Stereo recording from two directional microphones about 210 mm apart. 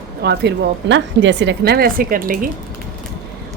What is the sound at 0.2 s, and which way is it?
A woman's voice, 50° right (ahead or behind).